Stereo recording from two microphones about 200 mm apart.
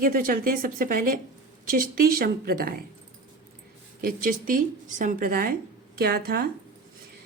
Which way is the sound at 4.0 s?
45° right (ahead or behind).